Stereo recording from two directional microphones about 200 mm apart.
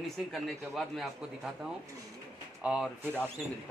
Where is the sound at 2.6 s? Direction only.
5° right (ahead or behind).